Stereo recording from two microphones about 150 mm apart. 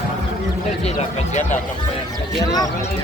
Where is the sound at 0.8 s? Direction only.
50° left (ahead or behind).